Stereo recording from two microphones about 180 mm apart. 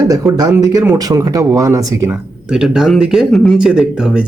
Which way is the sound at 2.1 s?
5° right (ahead or behind).